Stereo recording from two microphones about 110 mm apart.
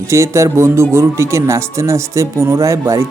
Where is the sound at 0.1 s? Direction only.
25° right (ahead or behind).